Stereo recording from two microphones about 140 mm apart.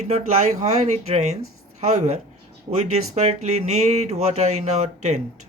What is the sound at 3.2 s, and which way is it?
Speech, 55° right (ahead or behind).